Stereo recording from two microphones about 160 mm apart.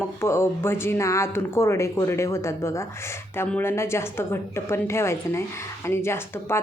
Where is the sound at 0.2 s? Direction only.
15° left (ahead or behind).